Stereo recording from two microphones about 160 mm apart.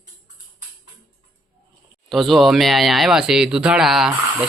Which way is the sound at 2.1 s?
Centre (ahead or behind).